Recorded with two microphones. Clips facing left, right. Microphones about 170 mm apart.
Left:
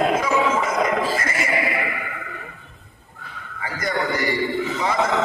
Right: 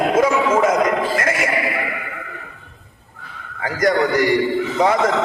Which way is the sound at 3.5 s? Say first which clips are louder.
Right 8 dB; 85° right.